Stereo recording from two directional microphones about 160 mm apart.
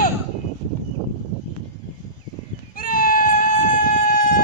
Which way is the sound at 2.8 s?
60° left (ahead or behind).